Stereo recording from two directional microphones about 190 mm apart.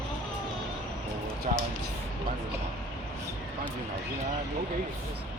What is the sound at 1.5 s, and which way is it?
Speech, 35° right (ahead or behind).